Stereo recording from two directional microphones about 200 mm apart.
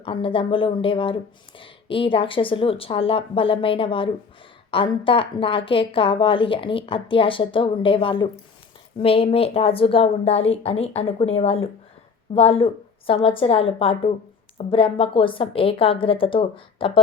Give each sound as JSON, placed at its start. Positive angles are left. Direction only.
{"t": 0.0, "sound": "speech", "side_deg": 25}